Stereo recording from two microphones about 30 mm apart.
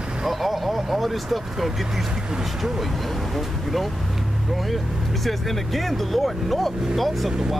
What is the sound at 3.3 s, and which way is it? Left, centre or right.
Speech, centre.